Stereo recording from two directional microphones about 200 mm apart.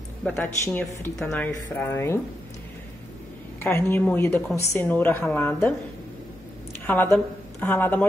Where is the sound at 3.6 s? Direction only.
10° left (ahead or behind).